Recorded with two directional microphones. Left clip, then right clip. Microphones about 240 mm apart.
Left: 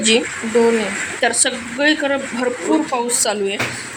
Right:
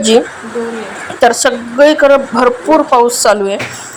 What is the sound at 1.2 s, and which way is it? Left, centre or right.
Speech, centre.